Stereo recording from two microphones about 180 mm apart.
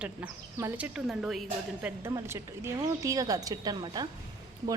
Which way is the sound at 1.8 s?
15° right (ahead or behind).